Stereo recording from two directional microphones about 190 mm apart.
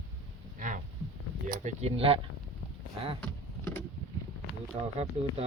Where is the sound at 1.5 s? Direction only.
40° right (ahead or behind).